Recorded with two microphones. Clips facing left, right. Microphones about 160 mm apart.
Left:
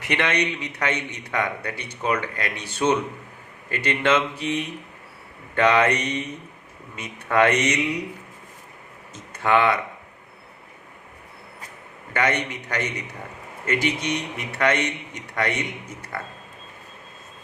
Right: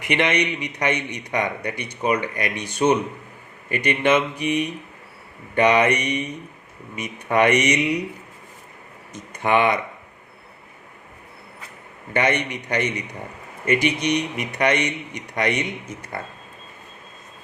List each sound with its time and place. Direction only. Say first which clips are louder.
0.0 s speech: right 2 dB; 15° right (ahead or behind)
9.1 s a man's voice: right 1 dB; 20° right (ahead or behind)
12.1 s a man's voice: right 2 dB; 20° right (ahead or behind)